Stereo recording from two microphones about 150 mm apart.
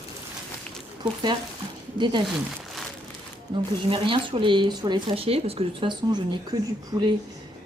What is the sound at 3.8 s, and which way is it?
Speech, 35° right (ahead or behind).